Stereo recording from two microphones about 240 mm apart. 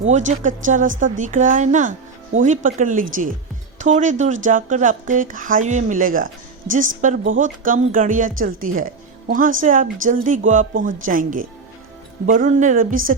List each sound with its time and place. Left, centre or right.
0.0 s speech: right